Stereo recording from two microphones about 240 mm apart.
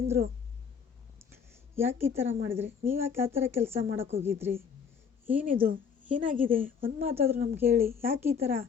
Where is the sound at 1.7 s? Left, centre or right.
Centre.